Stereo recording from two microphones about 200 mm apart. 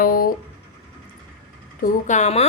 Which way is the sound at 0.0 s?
45° left (ahead or behind).